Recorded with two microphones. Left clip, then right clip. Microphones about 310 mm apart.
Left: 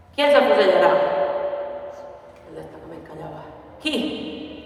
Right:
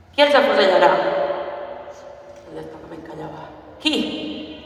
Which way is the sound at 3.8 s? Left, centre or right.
Centre.